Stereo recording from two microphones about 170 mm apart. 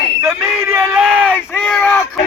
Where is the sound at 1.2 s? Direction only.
10° left (ahead or behind).